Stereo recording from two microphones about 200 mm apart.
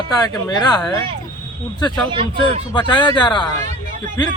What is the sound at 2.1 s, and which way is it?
Speech, 25° right (ahead or behind).